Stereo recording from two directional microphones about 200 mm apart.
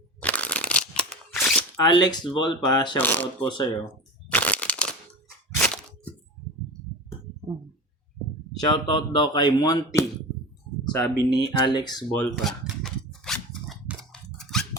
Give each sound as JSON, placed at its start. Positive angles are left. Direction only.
{"t": 0.2, "sound": "a sound", "side_deg": 5}
{"t": 1.8, "sound": "speech", "side_deg": 20}
{"t": 3.0, "sound": "speech", "side_deg": 10}
{"t": 3.4, "sound": "speech", "side_deg": 25}
{"t": 4.3, "sound": "crushing", "side_deg": 5}
{"t": 5.5, "sound": "crunch", "side_deg": 5}
{"t": 8.5, "sound": "speech", "side_deg": 25}
{"t": 12.1, "sound": "speech", "side_deg": 5}
{"t": 12.6, "sound": "a sound", "side_deg": 0}